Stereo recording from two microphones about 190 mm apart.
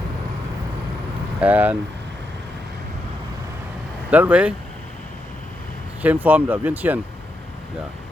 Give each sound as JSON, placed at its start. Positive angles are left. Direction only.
{"t": 1.4, "sound": "speech", "side_deg": -10}
{"t": 4.1, "sound": "speech", "side_deg": -5}
{"t": 6.0, "sound": "speech", "side_deg": -10}